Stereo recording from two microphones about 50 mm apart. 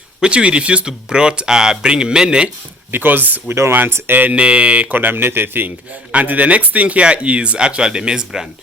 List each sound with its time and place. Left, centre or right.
0.2 s speech: right
2.9 s speech: right
3.7 s speech: right
4.2 s a man's voice: right
4.9 s speech: right
5.6 s a man's voice: right; by 8.4 s centre